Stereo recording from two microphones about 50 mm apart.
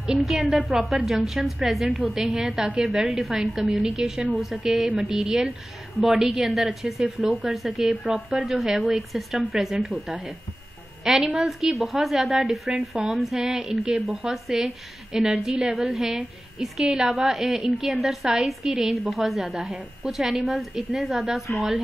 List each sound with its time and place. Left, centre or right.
0.2 s a woman's voice: centre
4.8 s a woman's voice: right
5.1 s a woman's voice: centre